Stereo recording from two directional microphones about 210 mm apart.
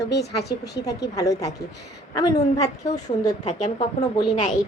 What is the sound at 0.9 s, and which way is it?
A woman's voice, 15° left (ahead or behind).